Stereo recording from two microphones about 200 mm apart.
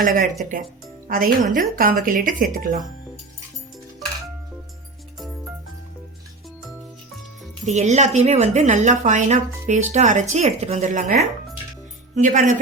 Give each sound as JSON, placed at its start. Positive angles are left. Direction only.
{"t": 0.0, "sound": "speech", "side_deg": -45}
{"t": 7.6, "sound": "speech", "side_deg": -35}